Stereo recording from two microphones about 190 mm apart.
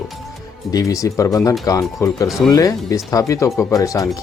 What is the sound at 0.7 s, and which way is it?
Speech, 20° left (ahead or behind).